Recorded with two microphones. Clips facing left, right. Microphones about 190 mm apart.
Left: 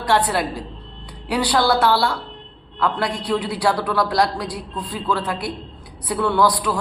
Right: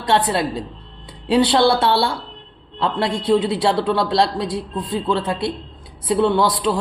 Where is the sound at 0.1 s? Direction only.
25° right (ahead or behind).